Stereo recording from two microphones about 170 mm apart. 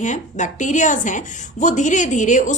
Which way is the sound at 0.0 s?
45° left (ahead or behind).